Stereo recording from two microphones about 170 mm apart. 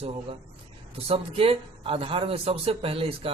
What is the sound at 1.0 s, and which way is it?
A man's voice, 35° right (ahead or behind).